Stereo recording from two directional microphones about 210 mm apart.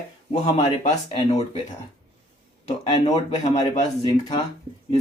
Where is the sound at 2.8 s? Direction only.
20° left (ahead or behind).